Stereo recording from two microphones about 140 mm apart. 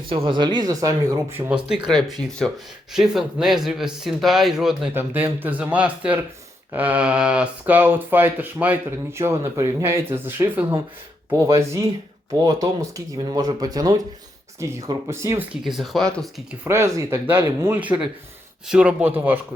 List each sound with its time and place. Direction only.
0.1 s speech: 35° right (ahead or behind); by 1.6 s 10° right (ahead or behind)
1.7 s speech: centre (ahead or behind)
4.9 s speech: 15° right (ahead or behind)
15.6 s speech: centre (ahead or behind)
16.6 s speech: 20° right (ahead or behind)